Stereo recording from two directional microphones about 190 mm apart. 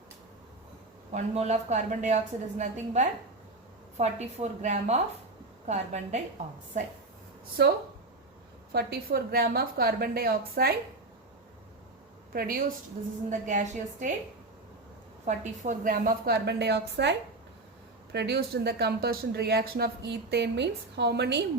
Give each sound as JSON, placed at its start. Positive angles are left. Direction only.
{"t": 1.1, "sound": "a woman's voice", "side_deg": -35}
{"t": 7.6, "sound": "a woman's voice", "side_deg": -60}
{"t": 12.3, "sound": "a woman's voice", "side_deg": -50}
{"t": 15.3, "sound": "a woman's voice", "side_deg": -35}